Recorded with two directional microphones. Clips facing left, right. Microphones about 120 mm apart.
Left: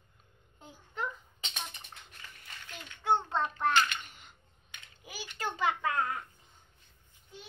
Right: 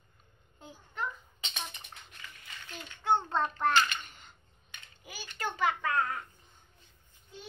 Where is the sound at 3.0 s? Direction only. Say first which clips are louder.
Right 1 dB; 5° left (ahead or behind).